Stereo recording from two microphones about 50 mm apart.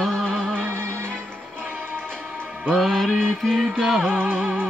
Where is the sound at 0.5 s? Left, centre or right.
Right.